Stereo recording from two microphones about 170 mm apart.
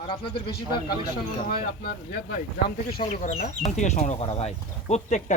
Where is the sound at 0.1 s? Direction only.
30° left (ahead or behind).